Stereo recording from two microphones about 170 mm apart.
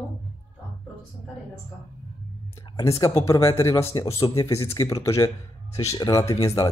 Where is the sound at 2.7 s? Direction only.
20° left (ahead or behind).